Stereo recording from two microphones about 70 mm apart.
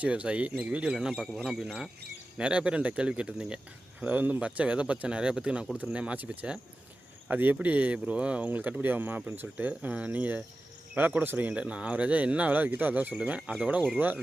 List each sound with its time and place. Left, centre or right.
0.0 s speech: centre
2.4 s speech: centre
4.1 s speech: right
7.3 s speech: right